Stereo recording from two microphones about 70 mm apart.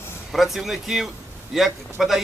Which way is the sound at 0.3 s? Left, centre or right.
Centre.